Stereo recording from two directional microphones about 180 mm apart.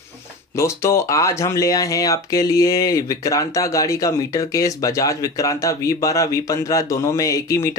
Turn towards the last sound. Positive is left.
turn(degrees=15)  # may be behind; listen again after turning